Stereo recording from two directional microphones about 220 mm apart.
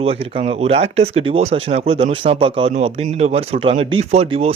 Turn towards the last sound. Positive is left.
turn(degrees=-25)  # may be behind; listen again after turning